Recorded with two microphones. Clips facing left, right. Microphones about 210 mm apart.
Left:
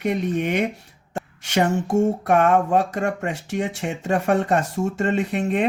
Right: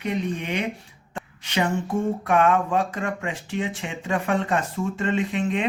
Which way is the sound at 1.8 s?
45° left (ahead or behind).